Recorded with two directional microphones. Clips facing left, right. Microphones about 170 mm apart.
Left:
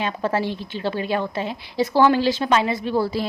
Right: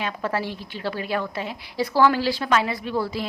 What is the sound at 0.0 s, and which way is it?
A woman's voice, 25° left (ahead or behind).